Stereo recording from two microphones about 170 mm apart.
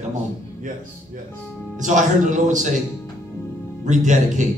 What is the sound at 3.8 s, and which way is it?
Speech, 45° right (ahead or behind).